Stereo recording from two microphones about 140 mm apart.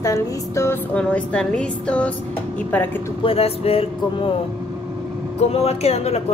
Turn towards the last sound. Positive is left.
turn(degrees=50)  # may be behind; listen again after turning